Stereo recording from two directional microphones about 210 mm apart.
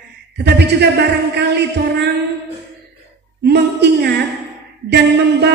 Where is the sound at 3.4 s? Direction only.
50° right (ahead or behind).